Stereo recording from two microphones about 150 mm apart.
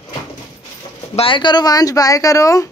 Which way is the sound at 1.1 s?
35° left (ahead or behind).